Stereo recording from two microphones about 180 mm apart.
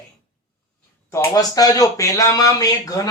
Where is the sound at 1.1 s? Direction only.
15° left (ahead or behind).